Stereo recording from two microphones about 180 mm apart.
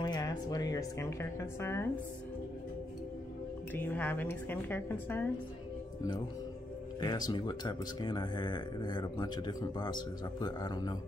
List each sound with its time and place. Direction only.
0.0 s speech: 25° left (ahead or behind)
3.7 s a woman's voice: 10° left (ahead or behind)
7.0 s speech: 25° left (ahead or behind)